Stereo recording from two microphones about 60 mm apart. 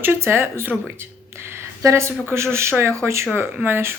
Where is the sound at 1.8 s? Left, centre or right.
Right.